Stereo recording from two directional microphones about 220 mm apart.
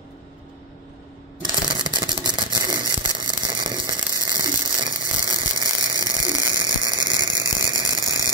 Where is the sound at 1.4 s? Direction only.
20° right (ahead or behind).